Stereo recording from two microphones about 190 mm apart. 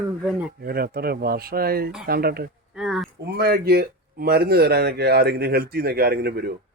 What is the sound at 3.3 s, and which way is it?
Speech, 55° right (ahead or behind).